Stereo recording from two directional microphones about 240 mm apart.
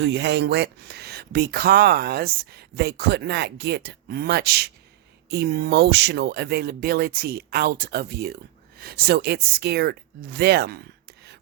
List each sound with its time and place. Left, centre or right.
0.0 s speech: right